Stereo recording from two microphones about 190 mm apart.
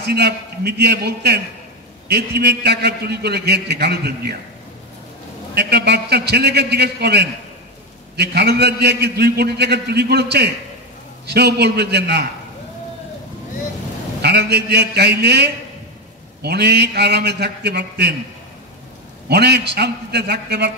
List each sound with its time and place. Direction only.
0.0 s a man's voice: 60° right (ahead or behind)
5.5 s a man's voice: 60° right (ahead or behind)
14.2 s a man's voice: 60° right (ahead or behind)
19.2 s a man's voice: 60° right (ahead or behind)